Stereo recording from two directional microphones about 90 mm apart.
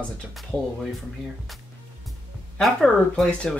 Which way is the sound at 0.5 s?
15° left (ahead or behind).